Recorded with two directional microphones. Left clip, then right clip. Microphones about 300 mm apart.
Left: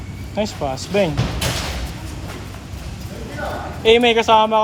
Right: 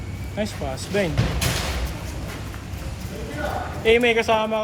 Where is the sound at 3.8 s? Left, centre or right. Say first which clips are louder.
Left 5 dB; left.